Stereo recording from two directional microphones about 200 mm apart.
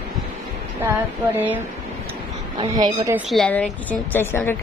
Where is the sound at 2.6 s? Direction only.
20° right (ahead or behind).